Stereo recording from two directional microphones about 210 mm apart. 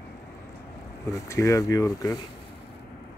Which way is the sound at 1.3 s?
15° left (ahead or behind).